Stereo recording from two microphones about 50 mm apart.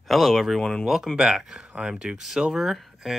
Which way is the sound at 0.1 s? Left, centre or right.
Centre.